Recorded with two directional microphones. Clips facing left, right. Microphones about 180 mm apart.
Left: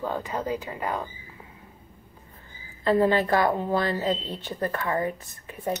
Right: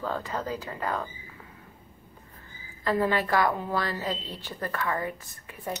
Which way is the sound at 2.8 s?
25° left (ahead or behind).